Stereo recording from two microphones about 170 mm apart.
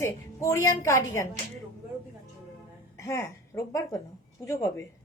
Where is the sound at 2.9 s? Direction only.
15° left (ahead or behind).